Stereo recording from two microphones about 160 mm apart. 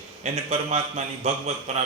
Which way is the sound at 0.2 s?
45° right (ahead or behind).